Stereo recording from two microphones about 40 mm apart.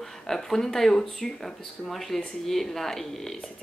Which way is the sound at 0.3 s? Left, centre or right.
Centre.